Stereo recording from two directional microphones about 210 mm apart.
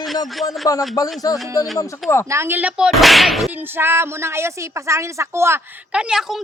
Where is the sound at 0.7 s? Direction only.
15° left (ahead or behind).